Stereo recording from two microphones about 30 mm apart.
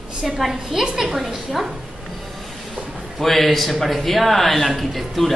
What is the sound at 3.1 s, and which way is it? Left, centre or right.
A man's voice, centre.